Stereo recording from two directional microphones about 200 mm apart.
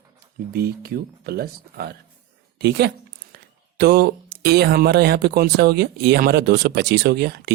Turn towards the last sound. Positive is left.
turn(degrees=-55)  # may be behind; listen again after turning